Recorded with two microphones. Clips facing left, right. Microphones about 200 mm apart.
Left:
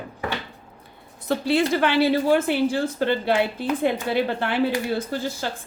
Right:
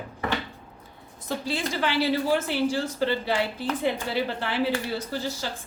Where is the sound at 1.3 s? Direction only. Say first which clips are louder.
Left 8 dB; 65° left (ahead or behind).